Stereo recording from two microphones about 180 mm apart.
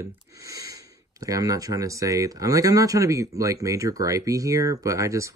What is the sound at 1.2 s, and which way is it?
Speech, 20° right (ahead or behind).